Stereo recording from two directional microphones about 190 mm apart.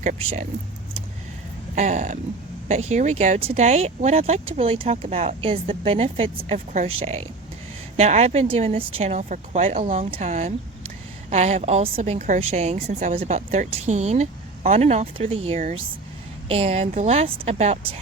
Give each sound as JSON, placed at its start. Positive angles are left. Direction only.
{"t": 0.0, "sound": "a woman's voice", "side_deg": -35}
{"t": 1.7, "sound": "a woman's voice", "side_deg": -40}